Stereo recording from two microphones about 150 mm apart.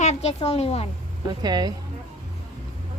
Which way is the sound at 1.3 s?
30° right (ahead or behind).